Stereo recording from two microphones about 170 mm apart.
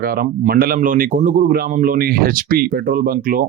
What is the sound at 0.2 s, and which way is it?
Speech, 60° right (ahead or behind).